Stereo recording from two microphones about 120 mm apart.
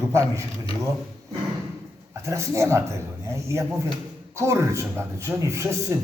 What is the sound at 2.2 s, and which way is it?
A man's voice, 25° right (ahead or behind).